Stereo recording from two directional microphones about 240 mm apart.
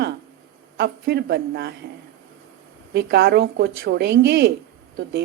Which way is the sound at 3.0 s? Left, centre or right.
Right.